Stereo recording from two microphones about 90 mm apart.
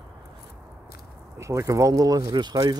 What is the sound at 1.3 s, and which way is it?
Speech, 35° right (ahead or behind).